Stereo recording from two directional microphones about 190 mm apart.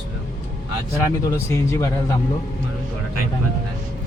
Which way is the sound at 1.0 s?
15° left (ahead or behind).